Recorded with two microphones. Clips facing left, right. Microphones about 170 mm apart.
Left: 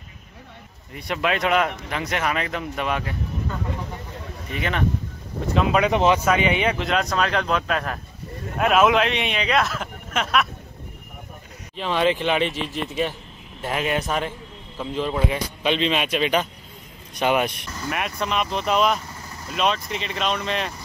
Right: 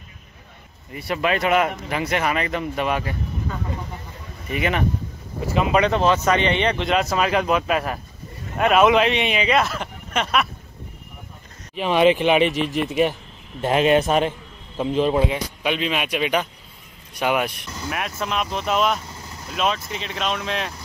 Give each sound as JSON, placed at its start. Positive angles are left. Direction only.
{"t": 0.9, "sound": "speech", "side_deg": -5}
{"t": 4.5, "sound": "speech", "side_deg": -10}
{"t": 5.9, "sound": "speech", "side_deg": 15}
{"t": 11.7, "sound": "speech", "side_deg": -15}
{"t": 13.6, "sound": "speech", "side_deg": -25}